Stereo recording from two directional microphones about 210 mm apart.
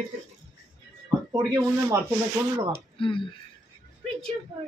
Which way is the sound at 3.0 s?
25° left (ahead or behind).